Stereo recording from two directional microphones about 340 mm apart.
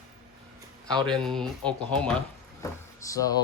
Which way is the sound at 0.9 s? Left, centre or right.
Centre.